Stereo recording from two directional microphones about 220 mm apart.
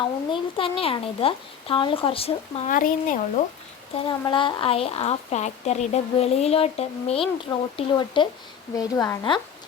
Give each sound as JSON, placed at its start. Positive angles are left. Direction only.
{"t": 0.3, "sound": "speech", "side_deg": 25}
{"t": 3.9, "sound": "a woman's voice", "side_deg": 20}